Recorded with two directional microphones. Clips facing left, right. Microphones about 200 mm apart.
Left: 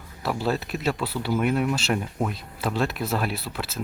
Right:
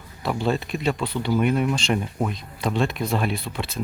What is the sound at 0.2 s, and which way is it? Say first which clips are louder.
Speech: right 2 dB; 5° left (ahead or behind).